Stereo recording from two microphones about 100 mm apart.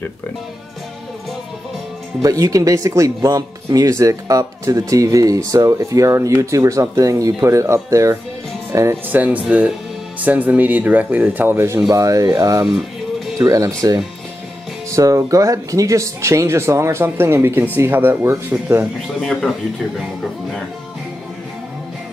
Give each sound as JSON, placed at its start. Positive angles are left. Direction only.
{"t": 2.2, "sound": "speech", "side_deg": -35}
{"t": 9.1, "sound": "speech", "side_deg": -15}
{"t": 11.9, "sound": "speech", "side_deg": -35}
{"t": 19.1, "sound": "speech", "side_deg": 5}